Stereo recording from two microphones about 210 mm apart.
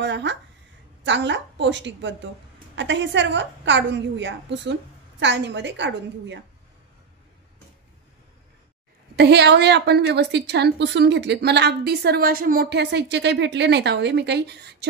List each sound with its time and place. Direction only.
0.0 s a woman's voice: 55° right (ahead or behind)
9.1 s a woman's voice: 55° right (ahead or behind)